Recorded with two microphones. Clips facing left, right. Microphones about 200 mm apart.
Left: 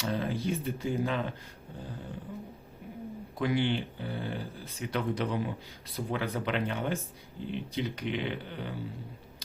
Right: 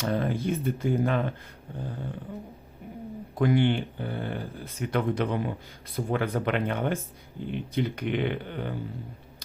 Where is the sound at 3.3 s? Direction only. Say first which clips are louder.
Right 6 dB; 50° right (ahead or behind).